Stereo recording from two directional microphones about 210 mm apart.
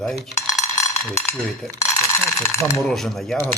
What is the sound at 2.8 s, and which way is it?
Speech, centre (ahead or behind).